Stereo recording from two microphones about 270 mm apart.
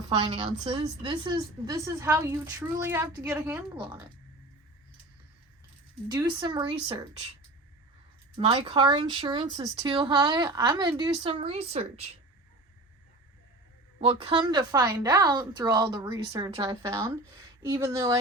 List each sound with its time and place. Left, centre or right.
0.1 s a woman's voice: centre
6.1 s a woman's voice: centre
8.4 s a woman's voice: centre
14.0 s a woman's voice: centre